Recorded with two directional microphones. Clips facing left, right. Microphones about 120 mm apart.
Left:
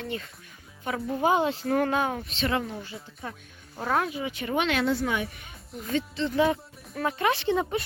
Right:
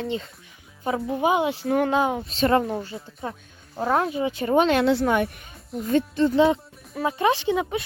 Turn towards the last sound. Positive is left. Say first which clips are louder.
# right 3 dB
turn(degrees=-10)  # may be behind; listen again after turning